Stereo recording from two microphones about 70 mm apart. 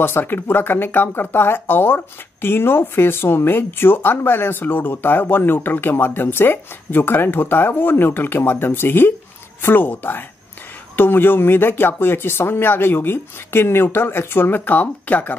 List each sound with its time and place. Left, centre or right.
0.0 s speech: left